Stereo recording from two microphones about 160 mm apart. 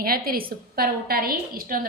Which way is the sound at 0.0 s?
65° right (ahead or behind).